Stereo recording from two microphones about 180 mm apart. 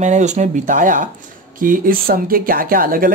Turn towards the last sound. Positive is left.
turn(degrees=-50)  # may be behind; listen again after turning